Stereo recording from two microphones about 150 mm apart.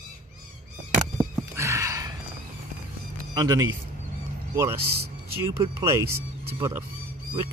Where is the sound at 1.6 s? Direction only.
20° right (ahead or behind).